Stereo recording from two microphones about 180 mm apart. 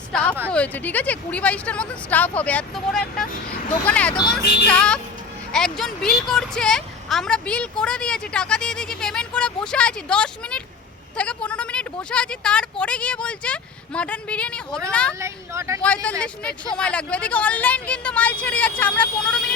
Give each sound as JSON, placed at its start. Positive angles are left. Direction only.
{"t": 0.1, "sound": "a sound", "side_deg": 5}
{"t": 0.5, "sound": "a woman's voice", "side_deg": 10}
{"t": 15.2, "sound": "speech", "side_deg": -15}
{"t": 16.2, "sound": "speech", "side_deg": 5}